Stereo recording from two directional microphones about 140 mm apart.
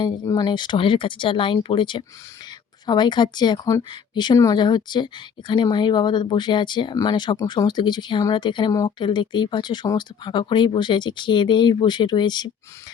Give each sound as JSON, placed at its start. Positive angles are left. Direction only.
{"t": 0.0, "sound": "speech", "side_deg": 30}